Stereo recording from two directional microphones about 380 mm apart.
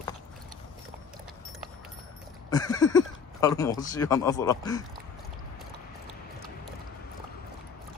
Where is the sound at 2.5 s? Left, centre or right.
Centre.